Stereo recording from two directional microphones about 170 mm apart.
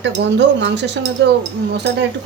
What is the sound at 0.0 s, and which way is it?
Speech, 90° right.